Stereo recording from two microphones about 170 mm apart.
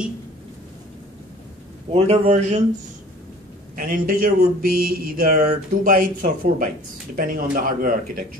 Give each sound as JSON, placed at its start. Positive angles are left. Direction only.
{"t": 1.9, "sound": "a man's voice", "side_deg": -35}
{"t": 3.7, "sound": "speech", "side_deg": -55}